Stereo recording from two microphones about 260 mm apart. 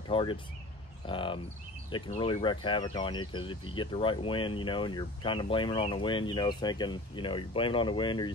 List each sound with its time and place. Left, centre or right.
0.1 s speech: centre